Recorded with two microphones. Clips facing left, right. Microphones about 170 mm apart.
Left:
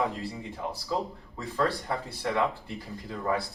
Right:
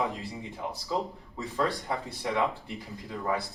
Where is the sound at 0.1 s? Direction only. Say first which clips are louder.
Left 2 dB; 20° right (ahead or behind).